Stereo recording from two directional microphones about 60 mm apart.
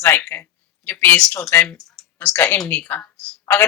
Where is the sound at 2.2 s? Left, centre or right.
Left.